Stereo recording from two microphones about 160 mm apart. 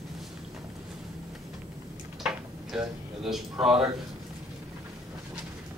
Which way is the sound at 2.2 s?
5° right (ahead or behind).